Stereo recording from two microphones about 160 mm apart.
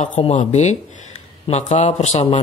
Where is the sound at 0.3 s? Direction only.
50° left (ahead or behind).